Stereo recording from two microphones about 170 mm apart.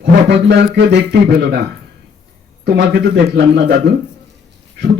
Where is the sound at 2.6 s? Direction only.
75° right (ahead or behind).